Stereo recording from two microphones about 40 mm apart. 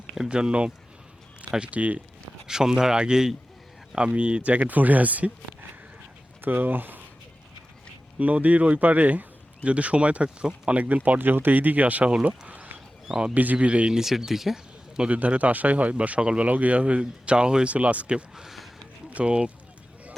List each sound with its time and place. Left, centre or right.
0.3 s speech: right
2.5 s speech: centre
3.9 s speech: right
6.4 s speech: right
8.2 s speech: right
11.2 s speech: right
12.5 s a sound: right
13.3 s speech: right
13.9 s speech: centre
15.1 s speech: right
18.3 s a sound: centre
19.2 s speech: right